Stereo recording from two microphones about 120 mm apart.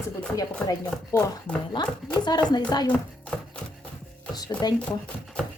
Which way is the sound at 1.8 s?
40° left (ahead or behind).